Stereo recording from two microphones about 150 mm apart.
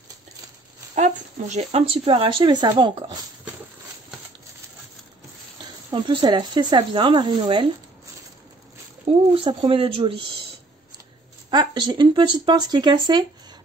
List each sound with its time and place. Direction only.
0.9 s speech: 50° right (ahead or behind); by 3.2 s 30° right (ahead or behind)
5.9 s speech: 30° right (ahead or behind)
9.3 s speech: 35° right (ahead or behind)
11.5 s speech: 30° right (ahead or behind)